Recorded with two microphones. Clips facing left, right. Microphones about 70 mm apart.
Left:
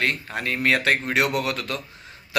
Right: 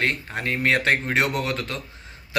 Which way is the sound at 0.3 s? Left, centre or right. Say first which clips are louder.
Even; right.